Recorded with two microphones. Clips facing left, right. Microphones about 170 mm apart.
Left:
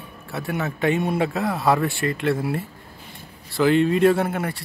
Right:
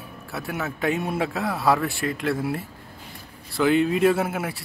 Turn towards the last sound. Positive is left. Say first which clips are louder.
# left 2 dB
turn(degrees=-5)  # may be behind; listen again after turning